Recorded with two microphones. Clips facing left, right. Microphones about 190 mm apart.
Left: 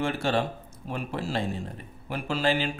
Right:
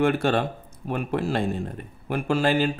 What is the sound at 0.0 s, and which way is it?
Speech, 55° right (ahead or behind).